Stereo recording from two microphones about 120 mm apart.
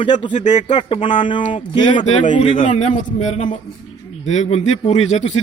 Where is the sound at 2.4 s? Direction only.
50° left (ahead or behind).